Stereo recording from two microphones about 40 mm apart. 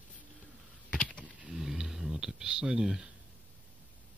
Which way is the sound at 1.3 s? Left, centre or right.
Centre.